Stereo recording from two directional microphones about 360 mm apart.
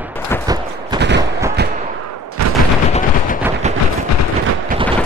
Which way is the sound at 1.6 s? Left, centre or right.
Right.